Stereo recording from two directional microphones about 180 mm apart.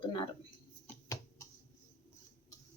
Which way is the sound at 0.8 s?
15° left (ahead or behind).